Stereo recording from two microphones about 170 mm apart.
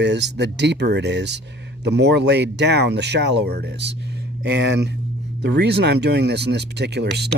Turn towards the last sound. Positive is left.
turn(degrees=-75)  # may be behind; listen again after turning